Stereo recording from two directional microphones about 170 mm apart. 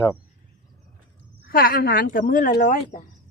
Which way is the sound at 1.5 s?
65° left (ahead or behind).